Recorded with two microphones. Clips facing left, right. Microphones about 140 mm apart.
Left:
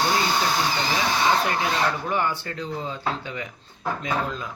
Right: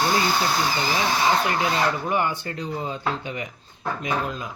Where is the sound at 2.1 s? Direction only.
15° right (ahead or behind).